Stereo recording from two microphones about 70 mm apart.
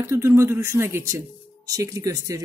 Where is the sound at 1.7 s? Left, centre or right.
Right.